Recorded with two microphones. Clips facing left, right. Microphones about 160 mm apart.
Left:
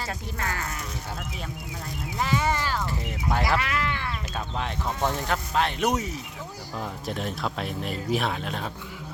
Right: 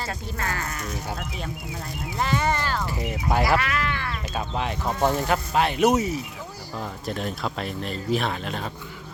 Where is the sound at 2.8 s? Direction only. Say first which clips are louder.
Right 2 dB; 10° right (ahead or behind).